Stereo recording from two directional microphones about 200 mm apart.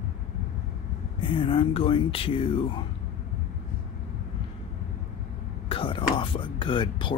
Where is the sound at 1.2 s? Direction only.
25° left (ahead or behind).